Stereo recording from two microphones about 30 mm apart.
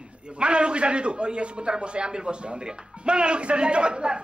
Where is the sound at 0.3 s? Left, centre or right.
Right.